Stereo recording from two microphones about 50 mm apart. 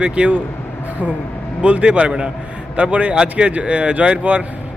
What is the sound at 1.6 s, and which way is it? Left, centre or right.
Speech, right.